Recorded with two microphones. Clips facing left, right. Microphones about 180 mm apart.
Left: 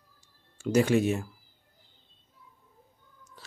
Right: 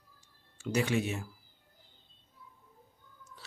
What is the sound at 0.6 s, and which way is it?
Speech, 45° left (ahead or behind).